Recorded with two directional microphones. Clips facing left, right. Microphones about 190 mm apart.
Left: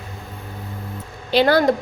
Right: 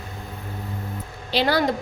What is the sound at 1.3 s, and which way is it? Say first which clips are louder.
Speech: left 6 dB; 50° left (ahead or behind).